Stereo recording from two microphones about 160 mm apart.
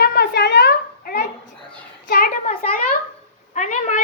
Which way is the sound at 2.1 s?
65° left (ahead or behind).